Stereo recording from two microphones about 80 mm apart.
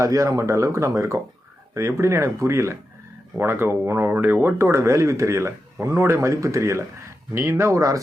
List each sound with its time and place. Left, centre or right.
0.0 s speech: right